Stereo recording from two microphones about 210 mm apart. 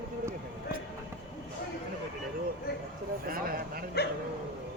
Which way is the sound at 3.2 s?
45° right (ahead or behind).